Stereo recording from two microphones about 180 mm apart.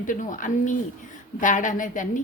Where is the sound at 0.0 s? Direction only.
45° left (ahead or behind).